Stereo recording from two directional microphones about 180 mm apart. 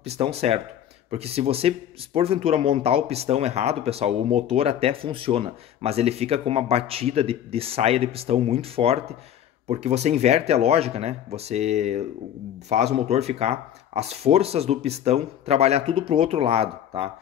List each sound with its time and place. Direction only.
0.0 s speech: 35° right (ahead or behind)